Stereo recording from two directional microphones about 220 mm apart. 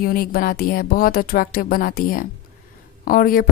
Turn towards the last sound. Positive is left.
turn(degrees=40)  # may be behind; listen again after turning